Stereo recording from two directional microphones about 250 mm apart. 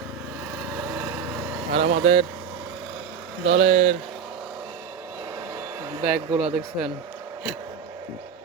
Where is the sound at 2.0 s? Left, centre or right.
Right.